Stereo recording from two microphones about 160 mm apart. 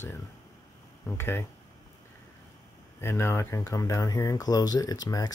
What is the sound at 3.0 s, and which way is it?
Speech, 15° left (ahead or behind).